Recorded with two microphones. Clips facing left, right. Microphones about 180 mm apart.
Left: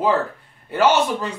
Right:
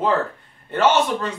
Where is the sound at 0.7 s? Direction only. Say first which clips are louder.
Left 1 dB; 10° left (ahead or behind).